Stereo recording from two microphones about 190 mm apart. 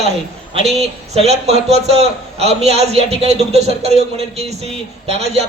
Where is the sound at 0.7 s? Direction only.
35° right (ahead or behind).